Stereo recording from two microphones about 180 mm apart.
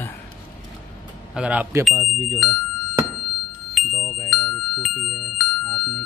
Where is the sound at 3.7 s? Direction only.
Centre (ahead or behind).